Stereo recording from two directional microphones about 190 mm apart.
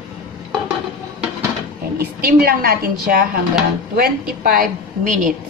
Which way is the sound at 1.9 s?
50° right (ahead or behind).